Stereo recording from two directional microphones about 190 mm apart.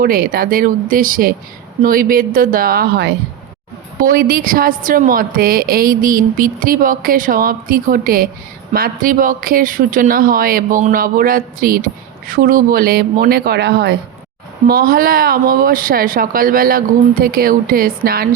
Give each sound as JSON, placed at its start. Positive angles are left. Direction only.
{"t": 0.0, "sound": "a woman's voice", "side_deg": -50}
{"t": 14.7, "sound": "a woman's voice", "side_deg": -50}